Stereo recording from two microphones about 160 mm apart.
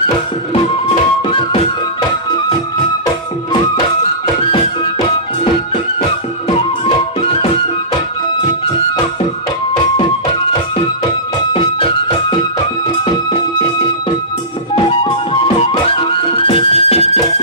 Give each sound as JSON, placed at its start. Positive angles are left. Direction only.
{"t": 0.8, "sound": "music", "side_deg": 35}
{"t": 11.5, "sound": "music", "side_deg": 35}
{"t": 14.9, "sound": "music", "side_deg": 35}